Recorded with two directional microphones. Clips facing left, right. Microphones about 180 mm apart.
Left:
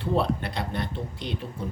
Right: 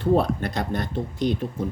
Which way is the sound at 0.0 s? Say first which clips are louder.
Right 5 dB; 45° right (ahead or behind).